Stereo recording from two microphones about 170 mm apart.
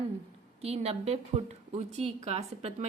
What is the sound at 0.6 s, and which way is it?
A woman's voice, 35° right (ahead or behind).